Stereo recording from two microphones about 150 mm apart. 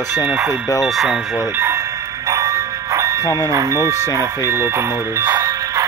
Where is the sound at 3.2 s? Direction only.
20° left (ahead or behind).